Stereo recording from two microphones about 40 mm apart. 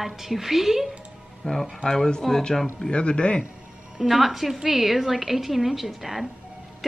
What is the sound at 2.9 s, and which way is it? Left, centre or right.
Speech, left.